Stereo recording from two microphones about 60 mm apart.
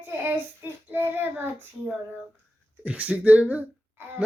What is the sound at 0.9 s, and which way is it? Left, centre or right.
Speech, right.